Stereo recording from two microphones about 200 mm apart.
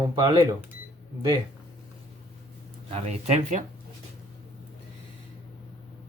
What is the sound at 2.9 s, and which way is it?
Speech, 30° right (ahead or behind).